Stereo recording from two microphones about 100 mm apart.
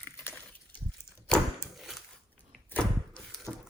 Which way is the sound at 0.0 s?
20° left (ahead or behind).